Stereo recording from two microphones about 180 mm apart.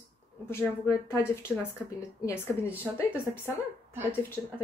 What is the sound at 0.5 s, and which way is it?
Speech, 15° left (ahead or behind).